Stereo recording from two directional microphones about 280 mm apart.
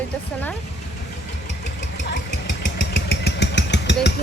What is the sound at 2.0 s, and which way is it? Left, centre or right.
Vehicle, left.